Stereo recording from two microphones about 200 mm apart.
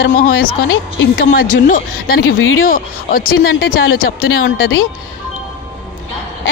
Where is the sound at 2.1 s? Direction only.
80° left.